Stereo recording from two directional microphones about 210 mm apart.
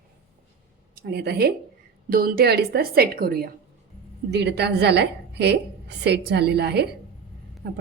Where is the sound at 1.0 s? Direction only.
50° right (ahead or behind).